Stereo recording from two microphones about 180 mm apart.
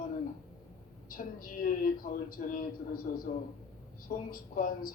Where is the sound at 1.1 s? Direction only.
50° left (ahead or behind).